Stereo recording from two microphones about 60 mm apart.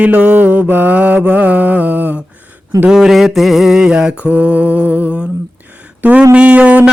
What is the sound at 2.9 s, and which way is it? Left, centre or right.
Mantra, centre.